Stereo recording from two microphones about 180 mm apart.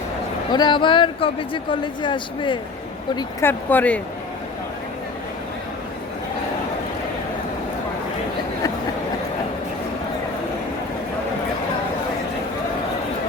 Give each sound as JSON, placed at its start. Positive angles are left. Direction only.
{"t": 0.5, "sound": "speech", "side_deg": 25}
{"t": 3.4, "sound": "speech", "side_deg": 10}